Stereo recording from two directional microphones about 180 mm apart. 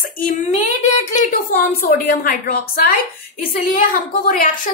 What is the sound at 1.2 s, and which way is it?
A woman's voice, 60° left (ahead or behind).